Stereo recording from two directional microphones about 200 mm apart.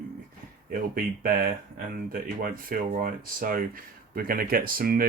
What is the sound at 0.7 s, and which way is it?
Speech, 45° right (ahead or behind).